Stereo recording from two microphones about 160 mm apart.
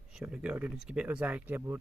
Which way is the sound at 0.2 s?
5° right (ahead or behind).